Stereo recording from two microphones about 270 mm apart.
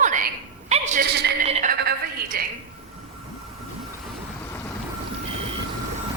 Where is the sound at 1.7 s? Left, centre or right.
Right.